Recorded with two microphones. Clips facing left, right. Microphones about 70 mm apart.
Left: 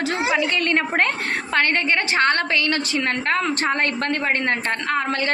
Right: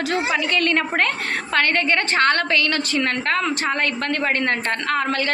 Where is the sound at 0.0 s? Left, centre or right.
Centre.